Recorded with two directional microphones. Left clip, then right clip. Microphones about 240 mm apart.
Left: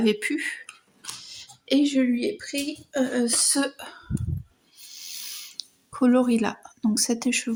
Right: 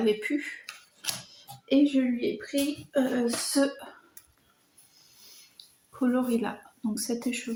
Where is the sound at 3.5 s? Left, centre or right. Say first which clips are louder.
Even; left.